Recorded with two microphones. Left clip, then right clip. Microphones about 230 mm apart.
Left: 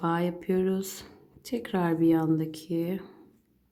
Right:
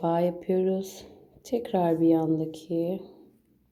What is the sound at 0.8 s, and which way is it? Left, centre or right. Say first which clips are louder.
A woman's voice: right 1 dB; centre.